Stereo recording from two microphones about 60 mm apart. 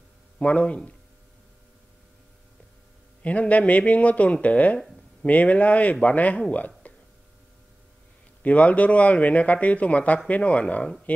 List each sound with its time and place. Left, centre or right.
0.4 s speech: left
3.2 s speech: left
6.8 s a sound: left
8.4 s speech: left